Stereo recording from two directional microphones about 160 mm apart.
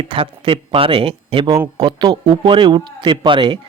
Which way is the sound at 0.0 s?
35° right (ahead or behind).